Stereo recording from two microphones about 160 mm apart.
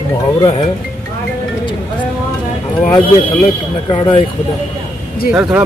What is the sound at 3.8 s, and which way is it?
Speech, 30° left (ahead or behind).